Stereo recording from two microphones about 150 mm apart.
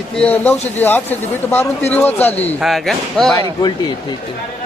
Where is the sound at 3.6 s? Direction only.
30° left (ahead or behind).